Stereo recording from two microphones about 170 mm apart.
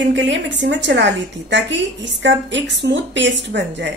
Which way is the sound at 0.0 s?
90° right.